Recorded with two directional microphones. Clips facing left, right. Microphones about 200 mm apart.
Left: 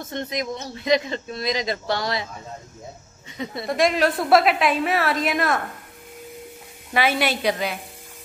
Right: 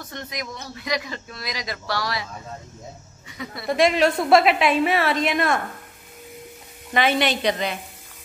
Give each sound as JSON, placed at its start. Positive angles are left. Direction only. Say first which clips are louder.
{"t": 0.0, "sound": "speech", "louder": "left 6 dB", "side_deg": 25}
{"t": 3.6, "sound": "a woman's voice", "louder": "right 2 dB", "side_deg": 0}
{"t": 6.9, "sound": "a woman's voice", "louder": "right 1 dB", "side_deg": 5}